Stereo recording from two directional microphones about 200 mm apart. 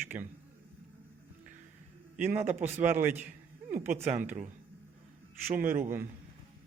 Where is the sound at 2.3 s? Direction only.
35° right (ahead or behind).